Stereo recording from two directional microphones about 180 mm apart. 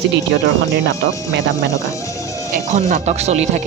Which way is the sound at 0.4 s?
75° right (ahead or behind).